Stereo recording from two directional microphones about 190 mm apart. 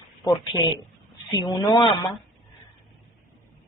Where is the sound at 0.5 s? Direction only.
20° left (ahead or behind).